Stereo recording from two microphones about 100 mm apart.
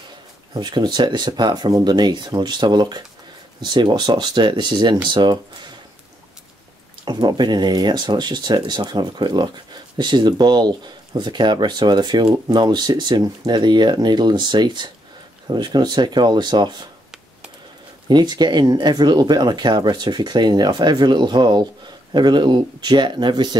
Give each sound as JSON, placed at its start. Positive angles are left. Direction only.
{"t": 0.6, "sound": "speech", "side_deg": -50}
{"t": 7.1, "sound": "speech", "side_deg": -45}
{"t": 18.0, "sound": "speech", "side_deg": -45}